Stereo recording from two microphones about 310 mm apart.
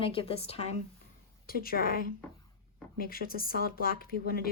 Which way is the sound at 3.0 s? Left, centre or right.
Left.